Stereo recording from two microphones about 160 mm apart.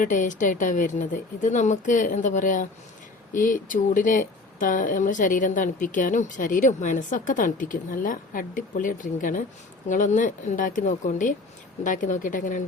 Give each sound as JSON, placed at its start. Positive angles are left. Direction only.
{"t": 0.0, "sound": "a woman's voice", "side_deg": 55}